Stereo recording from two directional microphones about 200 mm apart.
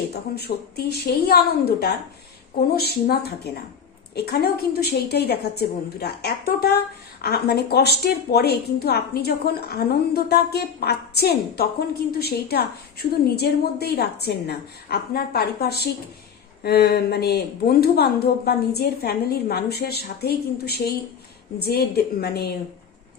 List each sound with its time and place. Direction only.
0.3 s a woman's voice: 50° left (ahead or behind)